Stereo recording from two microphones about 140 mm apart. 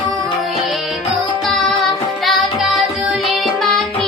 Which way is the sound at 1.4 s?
Centre (ahead or behind).